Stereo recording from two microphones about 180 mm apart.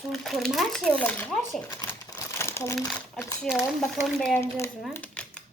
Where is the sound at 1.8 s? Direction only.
20° left (ahead or behind).